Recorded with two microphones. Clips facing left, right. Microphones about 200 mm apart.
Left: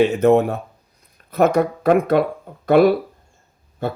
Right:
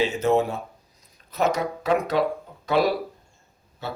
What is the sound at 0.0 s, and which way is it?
Speech, 60° left (ahead or behind).